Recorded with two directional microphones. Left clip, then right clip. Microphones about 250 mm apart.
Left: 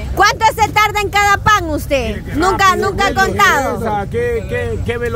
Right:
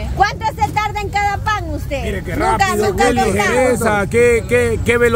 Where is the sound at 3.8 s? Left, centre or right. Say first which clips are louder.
Right 4 dB; right.